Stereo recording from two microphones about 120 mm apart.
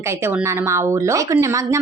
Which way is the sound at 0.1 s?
20° right (ahead or behind).